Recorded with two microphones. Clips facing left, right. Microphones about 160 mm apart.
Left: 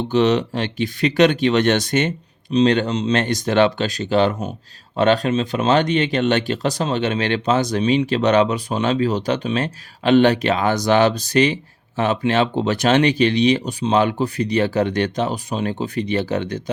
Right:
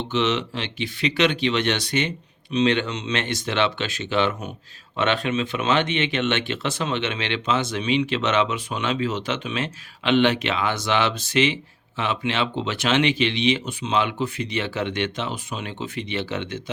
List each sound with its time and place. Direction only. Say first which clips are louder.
0.1 s speech: left 7 dB; 40° left (ahead or behind)